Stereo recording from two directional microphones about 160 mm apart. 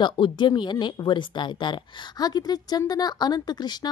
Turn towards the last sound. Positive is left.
turn(degrees=25)  # may be behind; listen again after turning